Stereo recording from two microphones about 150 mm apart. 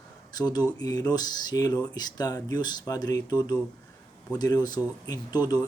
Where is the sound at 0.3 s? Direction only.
25° left (ahead or behind).